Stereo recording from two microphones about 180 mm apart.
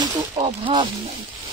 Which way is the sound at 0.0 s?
25° right (ahead or behind).